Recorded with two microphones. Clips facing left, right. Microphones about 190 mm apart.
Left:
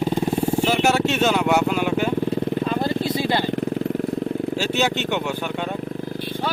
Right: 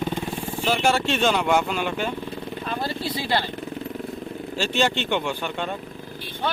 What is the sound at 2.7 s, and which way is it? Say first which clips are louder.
Vehicle: left 6 dB; 20° left (ahead or behind).